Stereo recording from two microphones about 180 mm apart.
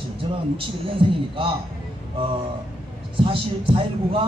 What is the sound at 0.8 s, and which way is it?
Speech, 30° right (ahead or behind).